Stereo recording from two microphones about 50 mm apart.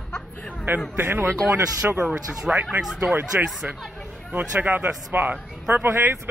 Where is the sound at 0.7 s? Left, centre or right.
Right.